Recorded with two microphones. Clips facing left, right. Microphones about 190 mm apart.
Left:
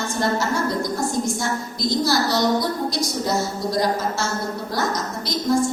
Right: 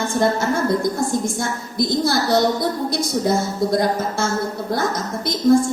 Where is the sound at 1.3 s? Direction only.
55° right (ahead or behind).